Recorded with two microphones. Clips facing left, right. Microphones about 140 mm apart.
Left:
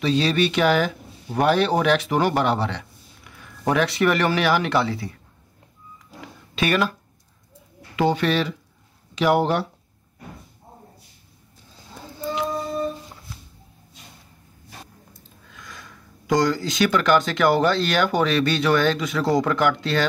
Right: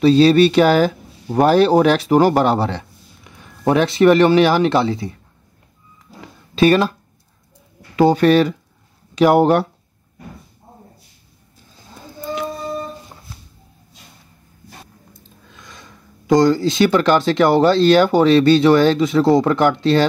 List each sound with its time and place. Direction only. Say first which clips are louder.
0.0 s speech: right 10 dB; 35° right (ahead or behind)
3.3 s speech: right 6 dB; 25° right (ahead or behind)
6.5 s speech: right 8 dB; 30° right (ahead or behind)
7.9 s speech: right 8 dB; 40° right (ahead or behind)
15.5 s speech: even; 25° right (ahead or behind)